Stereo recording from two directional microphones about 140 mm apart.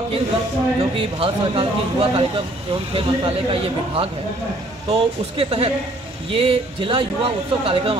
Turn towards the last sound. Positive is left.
turn(degrees=-40)  # may be behind; listen again after turning